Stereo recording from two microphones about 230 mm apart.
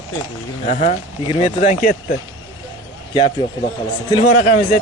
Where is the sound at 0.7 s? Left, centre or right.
Left.